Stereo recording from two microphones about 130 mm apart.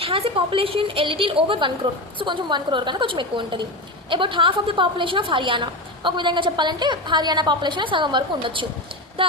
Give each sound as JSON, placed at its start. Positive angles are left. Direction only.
{"t": 0.0, "sound": "a woman's voice", "side_deg": -45}